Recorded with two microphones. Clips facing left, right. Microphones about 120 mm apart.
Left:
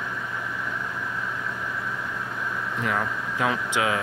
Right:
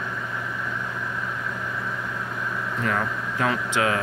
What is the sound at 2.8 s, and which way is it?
Speech, 15° left (ahead or behind).